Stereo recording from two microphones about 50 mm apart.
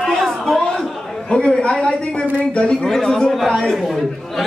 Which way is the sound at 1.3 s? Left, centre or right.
Centre.